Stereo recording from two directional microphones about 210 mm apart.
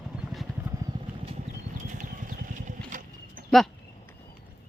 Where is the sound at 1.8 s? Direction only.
40° right (ahead or behind).